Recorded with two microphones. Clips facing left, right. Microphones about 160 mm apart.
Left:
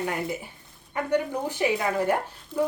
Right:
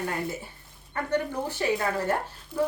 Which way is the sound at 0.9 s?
15° left (ahead or behind).